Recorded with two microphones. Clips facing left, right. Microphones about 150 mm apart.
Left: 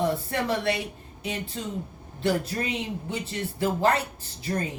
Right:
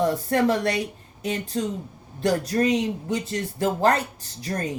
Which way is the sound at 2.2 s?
40° right (ahead or behind).